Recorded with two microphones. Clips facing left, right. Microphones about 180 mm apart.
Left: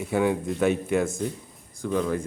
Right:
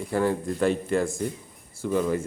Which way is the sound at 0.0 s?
Centre (ahead or behind).